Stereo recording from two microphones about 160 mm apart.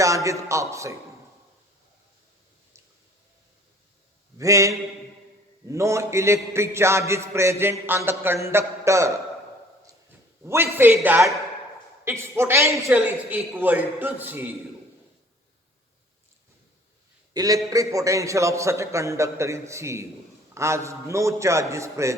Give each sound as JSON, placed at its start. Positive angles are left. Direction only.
{"t": 0.0, "sound": "a man's voice", "side_deg": -20}
{"t": 4.4, "sound": "a man's voice", "side_deg": -20}
{"t": 10.4, "sound": "a man's voice", "side_deg": -15}
{"t": 17.3, "sound": "a man's voice", "side_deg": -20}